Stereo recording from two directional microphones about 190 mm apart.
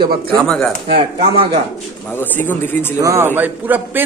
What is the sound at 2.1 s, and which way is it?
Speech, 10° left (ahead or behind).